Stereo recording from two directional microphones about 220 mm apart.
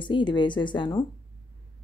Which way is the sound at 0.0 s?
20° left (ahead or behind).